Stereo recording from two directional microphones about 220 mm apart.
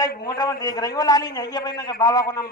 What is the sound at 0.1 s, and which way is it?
Speech, 45° left (ahead or behind).